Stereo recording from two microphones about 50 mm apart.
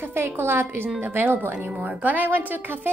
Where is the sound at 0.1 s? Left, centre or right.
Right.